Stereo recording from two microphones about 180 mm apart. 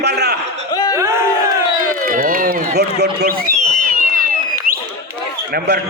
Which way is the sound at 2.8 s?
65° right (ahead or behind).